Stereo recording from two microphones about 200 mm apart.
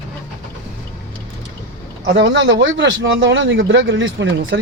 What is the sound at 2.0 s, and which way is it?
Speech, 65° right (ahead or behind).